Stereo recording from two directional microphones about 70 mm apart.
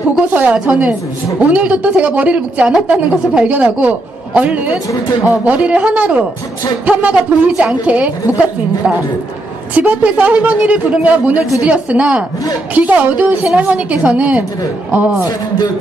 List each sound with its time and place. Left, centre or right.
0.3 s a woman's voice: centre
9.8 s a woman's voice: right